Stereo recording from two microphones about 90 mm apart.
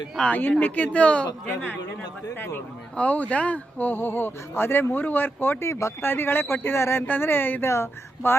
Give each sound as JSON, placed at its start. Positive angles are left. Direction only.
{"t": 0.2, "sound": "speech", "side_deg": 20}